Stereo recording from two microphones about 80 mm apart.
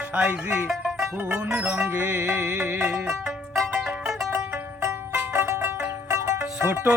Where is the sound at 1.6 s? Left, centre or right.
Right.